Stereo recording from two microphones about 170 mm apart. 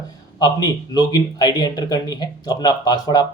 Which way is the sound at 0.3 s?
25° left (ahead or behind).